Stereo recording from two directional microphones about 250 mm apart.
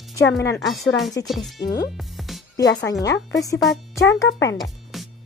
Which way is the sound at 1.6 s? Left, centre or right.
Left.